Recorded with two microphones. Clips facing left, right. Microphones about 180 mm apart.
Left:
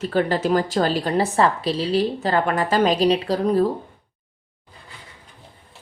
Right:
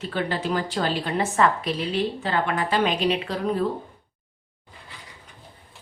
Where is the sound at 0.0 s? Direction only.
40° left (ahead or behind).